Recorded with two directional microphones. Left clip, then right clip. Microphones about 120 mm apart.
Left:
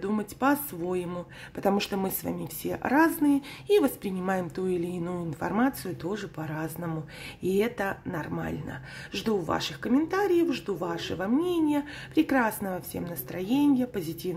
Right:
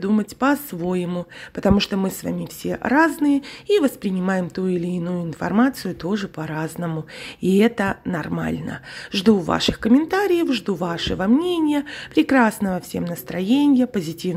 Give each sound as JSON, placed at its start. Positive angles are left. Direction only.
{"t": 0.0, "sound": "speech", "side_deg": -30}